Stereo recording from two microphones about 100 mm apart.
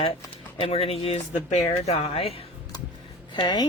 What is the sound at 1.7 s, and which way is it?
Speech, 90° left.